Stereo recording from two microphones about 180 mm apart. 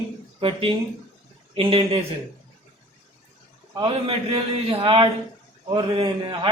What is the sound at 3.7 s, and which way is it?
A man's voice, 30° right (ahead or behind).